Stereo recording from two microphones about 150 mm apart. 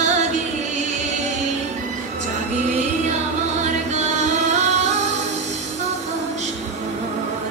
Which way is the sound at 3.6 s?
50° right (ahead or behind).